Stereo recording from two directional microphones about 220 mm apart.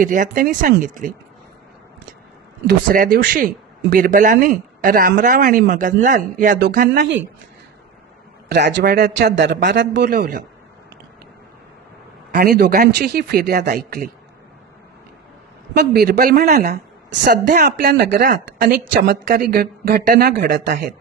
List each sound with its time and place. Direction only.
0.0 s speech: 35° right (ahead or behind)
2.9 s speech: 40° right (ahead or behind)
8.4 s speech: 50° right (ahead or behind)
10.2 s speech: 35° right (ahead or behind)
12.3 s speech: 45° right (ahead or behind)
15.7 s speech: 50° right (ahead or behind)